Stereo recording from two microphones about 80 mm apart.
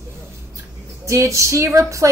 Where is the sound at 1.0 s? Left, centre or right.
Right.